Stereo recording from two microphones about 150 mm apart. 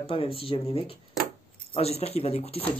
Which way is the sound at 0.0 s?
40° left (ahead or behind).